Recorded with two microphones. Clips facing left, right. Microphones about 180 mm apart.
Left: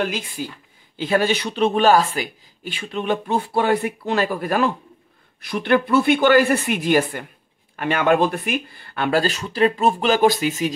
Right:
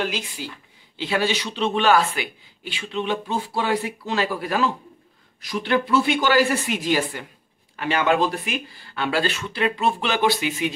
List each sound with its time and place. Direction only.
0.0 s speech: 50° left (ahead or behind)